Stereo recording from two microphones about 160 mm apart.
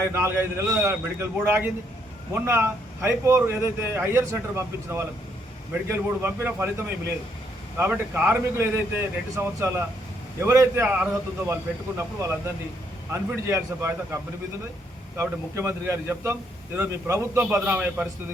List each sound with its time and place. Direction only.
0.0 s a man's voice: 15° right (ahead or behind)